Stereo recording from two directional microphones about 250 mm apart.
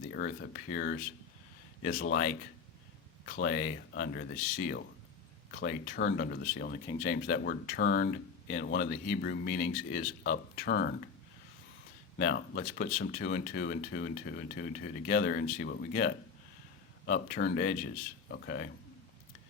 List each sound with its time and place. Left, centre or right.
0.1 s speech: left
12.1 s speech: left